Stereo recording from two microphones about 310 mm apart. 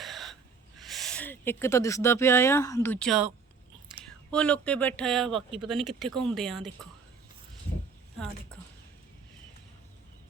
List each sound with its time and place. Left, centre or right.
0.0 s gasp: centre
0.8 s speech: centre